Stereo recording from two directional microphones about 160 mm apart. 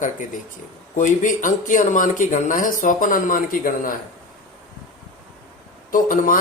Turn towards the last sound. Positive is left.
turn(degrees=55)  # may be behind; listen again after turning